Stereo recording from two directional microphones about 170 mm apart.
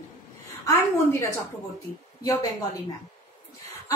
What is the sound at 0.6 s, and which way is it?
A woman's voice, 15° left (ahead or behind).